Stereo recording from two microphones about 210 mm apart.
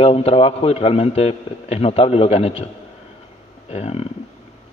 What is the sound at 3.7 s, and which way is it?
Speech, 30° left (ahead or behind).